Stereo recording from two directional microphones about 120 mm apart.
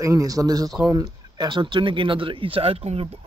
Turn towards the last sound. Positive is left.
turn(degrees=-60)  # may be behind; listen again after turning